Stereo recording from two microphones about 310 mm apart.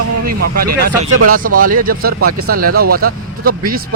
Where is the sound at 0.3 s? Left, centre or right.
Right.